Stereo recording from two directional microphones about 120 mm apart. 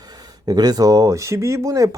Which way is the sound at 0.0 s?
35° right (ahead or behind).